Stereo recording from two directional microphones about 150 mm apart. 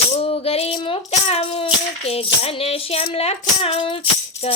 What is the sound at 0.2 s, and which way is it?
Music, 40° left (ahead or behind).